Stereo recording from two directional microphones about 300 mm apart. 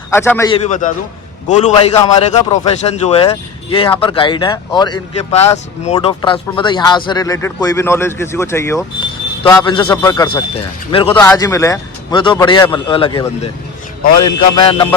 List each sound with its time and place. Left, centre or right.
0.1 s speech: centre
0.8 s a man's voice: left